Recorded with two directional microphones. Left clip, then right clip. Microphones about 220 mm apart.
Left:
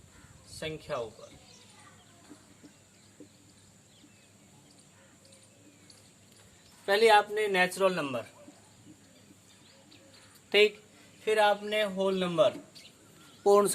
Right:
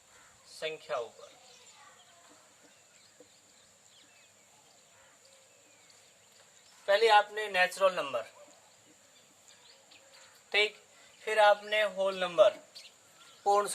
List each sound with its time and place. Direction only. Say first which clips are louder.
0.6 s speech: even; 20° left (ahead or behind)
6.8 s a man's voice: left 2 dB; 30° left (ahead or behind)
7.5 s speech: right 1 dB; 10° left (ahead or behind)
10.5 s speech: left 5 dB; 25° left (ahead or behind)
11.3 s speech: right 1 dB; 10° left (ahead or behind)
13.4 s speech: left 4 dB; 25° left (ahead or behind)